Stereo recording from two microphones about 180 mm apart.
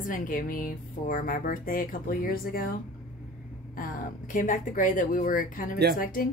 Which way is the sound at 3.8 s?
45° left (ahead or behind).